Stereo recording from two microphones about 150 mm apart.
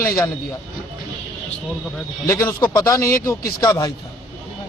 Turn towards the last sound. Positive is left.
turn(degrees=20)  # may be behind; listen again after turning